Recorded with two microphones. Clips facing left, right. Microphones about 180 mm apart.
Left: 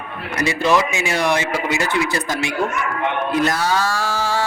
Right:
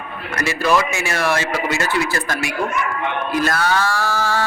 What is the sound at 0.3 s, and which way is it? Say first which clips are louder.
Speech: left 1 dB; 20° left (ahead or behind).